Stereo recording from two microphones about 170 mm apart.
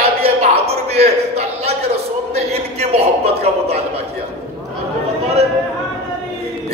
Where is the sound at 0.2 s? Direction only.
35° right (ahead or behind).